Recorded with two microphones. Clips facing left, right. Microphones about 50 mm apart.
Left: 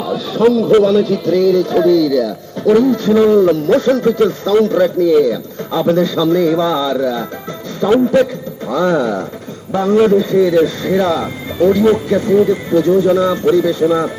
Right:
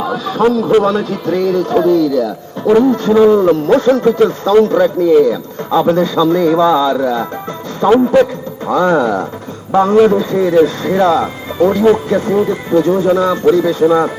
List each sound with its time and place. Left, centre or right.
0.3 s a man's voice: right
2.0 s speech: left
2.2 s a man's voice: right